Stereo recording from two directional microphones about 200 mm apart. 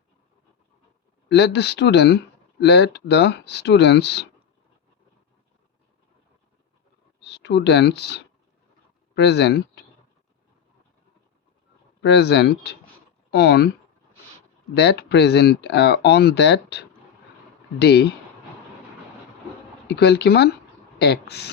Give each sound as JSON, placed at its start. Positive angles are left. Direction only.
{"t": 1.3, "sound": "speech", "side_deg": 55}
{"t": 7.2, "sound": "speech", "side_deg": 60}
{"t": 12.0, "sound": "speech", "side_deg": 55}
{"t": 14.7, "sound": "speech", "side_deg": 55}
{"t": 19.9, "sound": "speech", "side_deg": 55}